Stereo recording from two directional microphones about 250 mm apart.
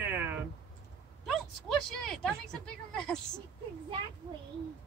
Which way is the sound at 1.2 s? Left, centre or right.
Centre.